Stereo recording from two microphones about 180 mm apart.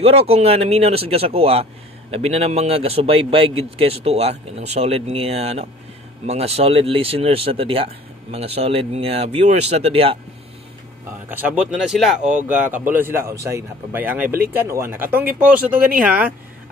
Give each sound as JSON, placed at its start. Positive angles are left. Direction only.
{"t": 0.0, "sound": "speech", "side_deg": -35}
{"t": 11.2, "sound": "speech", "side_deg": -10}